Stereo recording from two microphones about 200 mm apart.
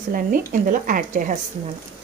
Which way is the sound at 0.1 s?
45° right (ahead or behind).